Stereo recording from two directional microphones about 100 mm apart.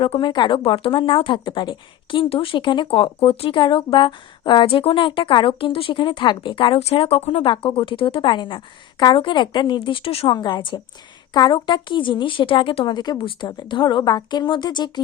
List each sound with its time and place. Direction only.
0.0 s speech: 55° left (ahead or behind)
0.6 s speech: 65° left (ahead or behind)
4.6 s speech: 70° left (ahead or behind)
10.2 s speech: 45° left (ahead or behind)
13.1 s speech: 55° left (ahead or behind)